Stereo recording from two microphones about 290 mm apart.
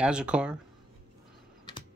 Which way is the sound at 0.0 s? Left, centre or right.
Centre.